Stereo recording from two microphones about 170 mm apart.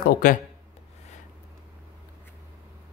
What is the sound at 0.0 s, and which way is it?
Speech, 55° left (ahead or behind).